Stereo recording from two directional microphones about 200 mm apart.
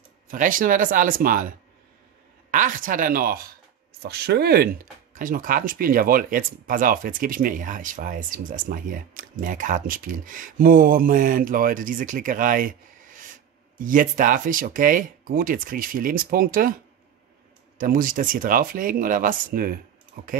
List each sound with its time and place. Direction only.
0.3 s speech: 40° right (ahead or behind)
2.5 s speech: 40° right (ahead or behind)
17.7 s speech: 45° right (ahead or behind)